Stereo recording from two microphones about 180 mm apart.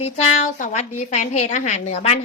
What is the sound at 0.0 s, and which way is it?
A woman's voice, 40° left (ahead or behind).